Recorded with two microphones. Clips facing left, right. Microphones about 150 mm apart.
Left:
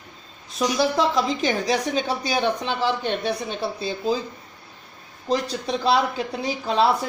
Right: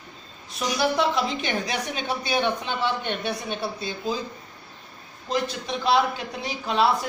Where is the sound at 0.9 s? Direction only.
35° left (ahead or behind).